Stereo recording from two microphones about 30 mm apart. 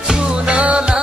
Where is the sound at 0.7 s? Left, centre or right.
Right.